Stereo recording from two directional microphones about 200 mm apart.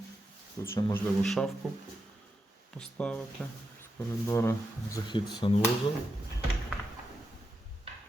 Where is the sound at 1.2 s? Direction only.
Centre (ahead or behind).